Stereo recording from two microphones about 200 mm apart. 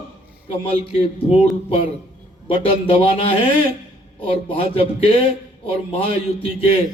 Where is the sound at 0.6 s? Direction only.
30° left (ahead or behind).